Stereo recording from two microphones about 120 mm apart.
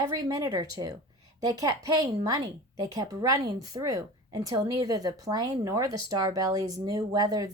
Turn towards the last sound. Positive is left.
turn(degrees=-30)  # may be behind; listen again after turning